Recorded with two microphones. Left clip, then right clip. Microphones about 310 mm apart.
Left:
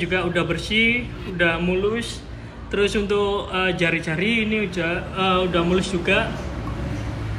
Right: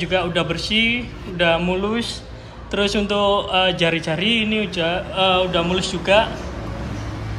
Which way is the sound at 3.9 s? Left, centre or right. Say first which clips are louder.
Right 2 dB; right.